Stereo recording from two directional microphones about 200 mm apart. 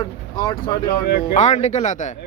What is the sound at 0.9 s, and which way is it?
Speech, 55° left (ahead or behind).